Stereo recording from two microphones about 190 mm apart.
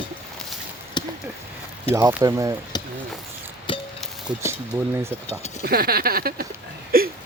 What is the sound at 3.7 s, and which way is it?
Music, 25° left (ahead or behind).